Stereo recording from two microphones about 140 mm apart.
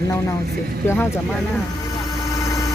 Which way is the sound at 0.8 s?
15° left (ahead or behind).